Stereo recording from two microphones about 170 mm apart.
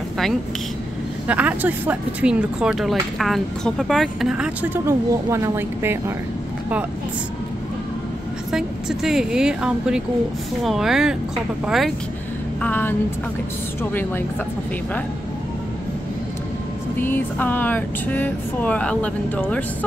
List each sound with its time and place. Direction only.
1.2 s speech: 10° right (ahead or behind)
4.8 s speech: 15° right (ahead or behind)
8.5 s speech: 5° right (ahead or behind)
12.6 s speech: 10° left (ahead or behind)
16.9 s speech: 10° left (ahead or behind)